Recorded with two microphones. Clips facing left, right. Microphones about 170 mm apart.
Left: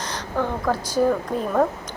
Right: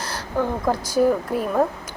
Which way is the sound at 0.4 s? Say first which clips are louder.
Right 1 dB; 15° right (ahead or behind).